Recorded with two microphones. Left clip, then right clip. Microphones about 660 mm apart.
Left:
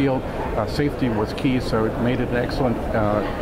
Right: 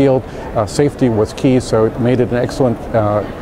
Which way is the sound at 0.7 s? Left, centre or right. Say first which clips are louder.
Right 8 dB; right.